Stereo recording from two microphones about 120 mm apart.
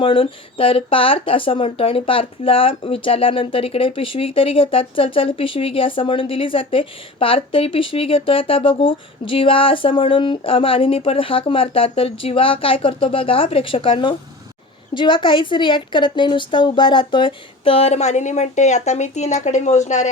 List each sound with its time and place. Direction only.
0.0 s speech: 50° left (ahead or behind); by 20.1 s 80° left